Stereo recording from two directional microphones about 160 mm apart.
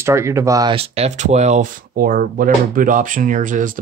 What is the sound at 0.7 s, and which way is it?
Speech, 40° right (ahead or behind).